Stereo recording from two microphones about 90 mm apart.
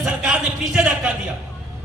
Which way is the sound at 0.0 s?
10° right (ahead or behind).